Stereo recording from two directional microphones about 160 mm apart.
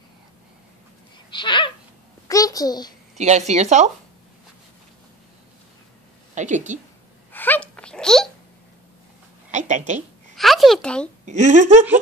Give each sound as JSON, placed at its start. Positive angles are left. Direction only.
{"t": 1.3, "sound": "a child's voice", "side_deg": 30}
{"t": 3.2, "sound": "a woman's voice", "side_deg": -45}
{"t": 6.3, "sound": "a woman's voice", "side_deg": -50}
{"t": 7.3, "sound": "a sound", "side_deg": 10}
{"t": 9.5, "sound": "a woman's voice", "side_deg": -50}
{"t": 10.3, "sound": "a sound", "side_deg": 0}
{"t": 11.2, "sound": "a woman's voice", "side_deg": -50}